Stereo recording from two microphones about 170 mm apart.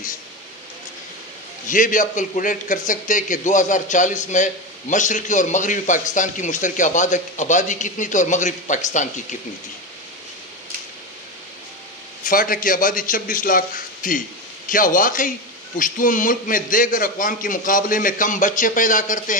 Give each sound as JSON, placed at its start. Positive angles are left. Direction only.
{"t": 1.7, "sound": "a man's voice", "side_deg": 50}
{"t": 12.3, "sound": "a man's voice", "side_deg": 55}